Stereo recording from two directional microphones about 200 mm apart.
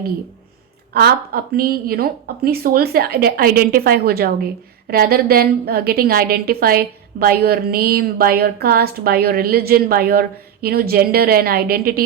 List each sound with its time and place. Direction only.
0.9 s a woman's voice: 50° right (ahead or behind)